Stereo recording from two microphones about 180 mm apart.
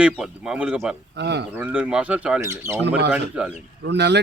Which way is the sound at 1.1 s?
70° right (ahead or behind).